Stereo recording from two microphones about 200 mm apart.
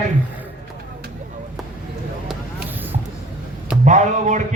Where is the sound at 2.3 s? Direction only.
10° right (ahead or behind).